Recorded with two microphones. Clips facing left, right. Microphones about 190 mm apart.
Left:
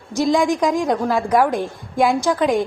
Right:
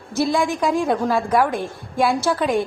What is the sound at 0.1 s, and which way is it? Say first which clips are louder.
A woman's voice: left 3 dB; 15° left (ahead or behind).